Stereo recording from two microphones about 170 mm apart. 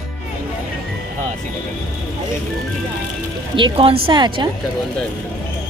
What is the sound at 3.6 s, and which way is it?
Speech, 30° right (ahead or behind).